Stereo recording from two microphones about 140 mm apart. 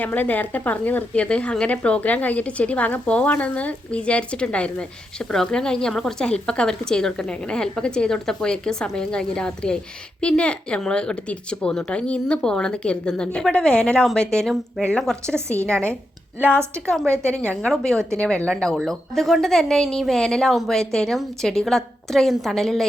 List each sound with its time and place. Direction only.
0.0 s speech: 10° left (ahead or behind)
17.2 s speech: 10° left (ahead or behind)